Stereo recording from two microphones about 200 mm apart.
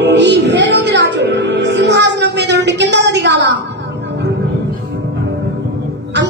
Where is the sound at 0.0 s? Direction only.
60° right (ahead or behind).